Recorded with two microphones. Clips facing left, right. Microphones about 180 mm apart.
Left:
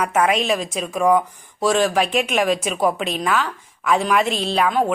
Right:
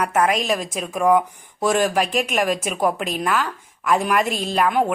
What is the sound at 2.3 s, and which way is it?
Speech, 5° right (ahead or behind).